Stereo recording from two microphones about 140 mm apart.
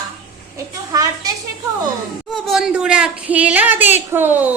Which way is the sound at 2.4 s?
5° right (ahead or behind).